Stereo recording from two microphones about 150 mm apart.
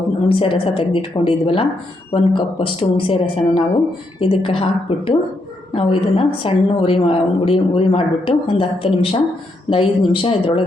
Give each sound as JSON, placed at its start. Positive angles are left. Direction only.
{"t": 0.3, "sound": "a woman's voice", "side_deg": 35}